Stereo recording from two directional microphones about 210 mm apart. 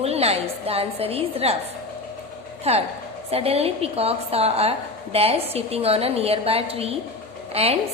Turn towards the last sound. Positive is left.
turn(degrees=-30)  # may be behind; listen again after turning